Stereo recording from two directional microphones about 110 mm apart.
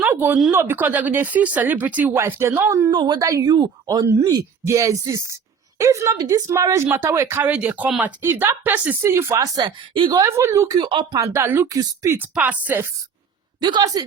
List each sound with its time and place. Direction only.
0.0 s a sound: 20° right (ahead or behind)
0.5 s speech: 20° right (ahead or behind)
2.9 s speech: 40° right (ahead or behind)
10.2 s speech: 25° right (ahead or behind)
11.2 s speech: 25° right (ahead or behind)
13.6 s speech: 40° right (ahead or behind)